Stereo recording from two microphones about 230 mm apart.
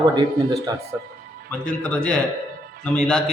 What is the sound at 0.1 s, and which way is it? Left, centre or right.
Speech, centre.